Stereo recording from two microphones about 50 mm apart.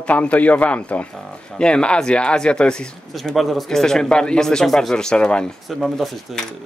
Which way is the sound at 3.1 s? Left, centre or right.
Centre.